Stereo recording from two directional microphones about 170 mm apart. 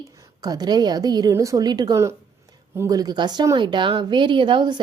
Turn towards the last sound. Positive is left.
turn(degrees=-25)  # may be behind; listen again after turning